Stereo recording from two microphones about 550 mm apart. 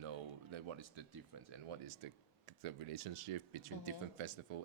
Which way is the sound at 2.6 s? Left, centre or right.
Right.